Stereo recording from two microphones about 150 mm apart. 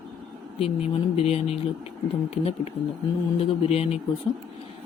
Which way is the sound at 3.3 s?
40° left (ahead or behind).